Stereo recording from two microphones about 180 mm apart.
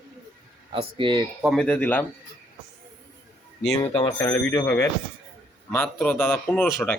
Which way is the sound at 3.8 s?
35° left (ahead or behind).